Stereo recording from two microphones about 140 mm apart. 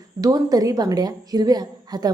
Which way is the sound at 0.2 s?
25° right (ahead or behind).